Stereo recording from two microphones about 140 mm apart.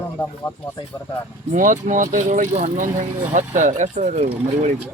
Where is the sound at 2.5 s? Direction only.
50° right (ahead or behind).